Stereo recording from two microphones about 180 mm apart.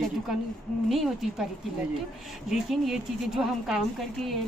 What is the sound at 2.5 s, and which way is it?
A woman's voice, centre (ahead or behind).